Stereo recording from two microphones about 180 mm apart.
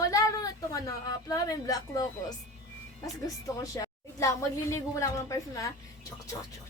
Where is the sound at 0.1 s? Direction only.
20° left (ahead or behind).